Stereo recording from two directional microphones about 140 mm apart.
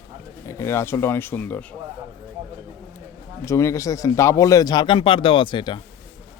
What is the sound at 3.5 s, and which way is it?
Speech, 20° left (ahead or behind).